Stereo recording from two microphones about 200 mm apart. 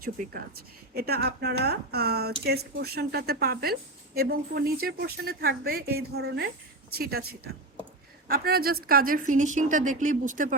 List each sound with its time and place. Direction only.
0.2 s a woman's voice: 45° right (ahead or behind)